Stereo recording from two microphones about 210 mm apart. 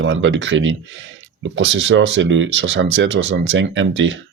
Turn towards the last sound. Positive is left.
turn(degrees=-60)  # may be behind; listen again after turning